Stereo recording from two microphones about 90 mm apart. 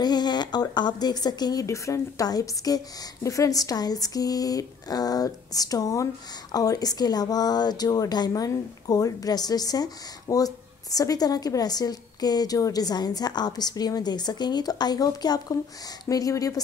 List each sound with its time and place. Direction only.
0.0 s speech: 50° left (ahead or behind)